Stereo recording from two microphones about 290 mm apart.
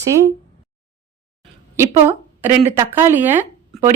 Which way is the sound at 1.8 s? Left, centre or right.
Centre.